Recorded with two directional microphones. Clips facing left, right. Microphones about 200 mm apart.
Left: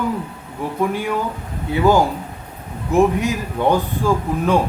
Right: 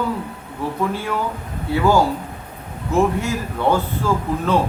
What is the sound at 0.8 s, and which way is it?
Speech, 15° left (ahead or behind).